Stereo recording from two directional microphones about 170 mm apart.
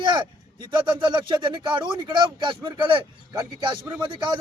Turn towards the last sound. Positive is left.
turn(degrees=-25)  # may be behind; listen again after turning